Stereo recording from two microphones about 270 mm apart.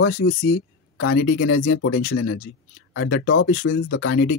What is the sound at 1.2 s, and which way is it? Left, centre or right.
Speech, left.